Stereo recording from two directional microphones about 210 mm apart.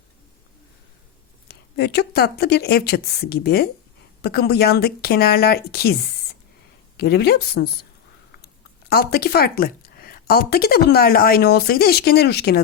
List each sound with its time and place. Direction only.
1.5 s speech: 50° left (ahead or behind)
8.9 s speech: 50° left (ahead or behind)